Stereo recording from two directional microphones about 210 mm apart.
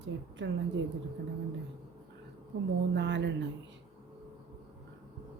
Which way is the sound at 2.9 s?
55° right (ahead or behind).